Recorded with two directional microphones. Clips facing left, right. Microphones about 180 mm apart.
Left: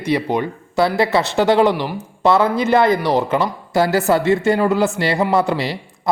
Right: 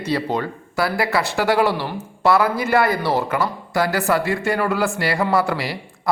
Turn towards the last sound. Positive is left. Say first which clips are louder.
# left 2 dB
turn(degrees=25)  # may be behind; listen again after turning